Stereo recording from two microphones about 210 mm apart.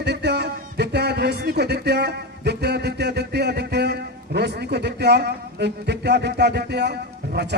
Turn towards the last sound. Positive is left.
turn(degrees=-50)  # may be behind; listen again after turning